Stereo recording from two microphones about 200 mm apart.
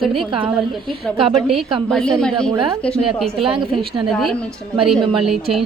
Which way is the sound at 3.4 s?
25° right (ahead or behind).